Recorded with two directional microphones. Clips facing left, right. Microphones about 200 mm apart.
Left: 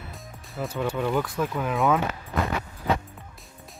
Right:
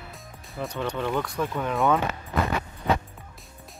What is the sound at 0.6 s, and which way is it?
Speech, 5° left (ahead or behind).